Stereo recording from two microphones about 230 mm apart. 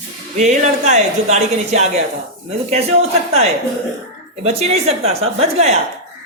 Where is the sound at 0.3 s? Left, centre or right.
Right.